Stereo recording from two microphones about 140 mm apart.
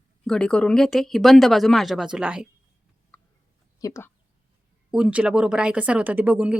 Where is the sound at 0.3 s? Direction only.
5° left (ahead or behind).